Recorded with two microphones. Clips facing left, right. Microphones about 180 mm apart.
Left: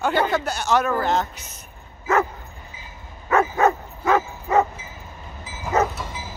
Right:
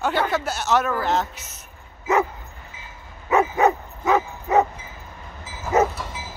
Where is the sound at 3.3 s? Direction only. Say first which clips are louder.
Even; 20° right (ahead or behind).